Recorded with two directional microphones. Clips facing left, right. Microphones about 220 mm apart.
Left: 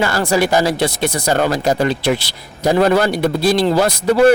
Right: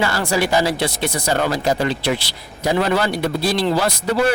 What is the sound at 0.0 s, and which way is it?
Speech, 45° left (ahead or behind).